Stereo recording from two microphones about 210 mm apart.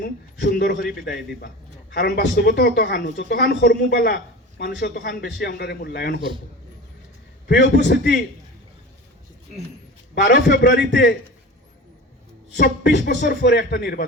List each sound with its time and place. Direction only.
0.0 s a woman's voice: 50° left (ahead or behind)
7.4 s a woman's voice: 55° left (ahead or behind)
10.2 s a woman's voice: 55° left (ahead or behind)
12.5 s a woman's voice: 55° left (ahead or behind)